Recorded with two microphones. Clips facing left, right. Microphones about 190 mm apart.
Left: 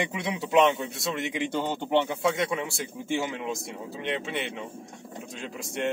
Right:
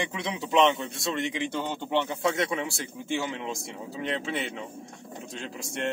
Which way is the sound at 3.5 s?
Centre (ahead or behind).